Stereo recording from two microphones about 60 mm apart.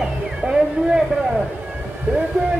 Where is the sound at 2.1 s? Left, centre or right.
Right.